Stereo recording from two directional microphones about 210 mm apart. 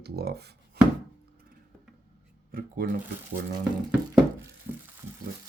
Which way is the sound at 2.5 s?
40° right (ahead or behind).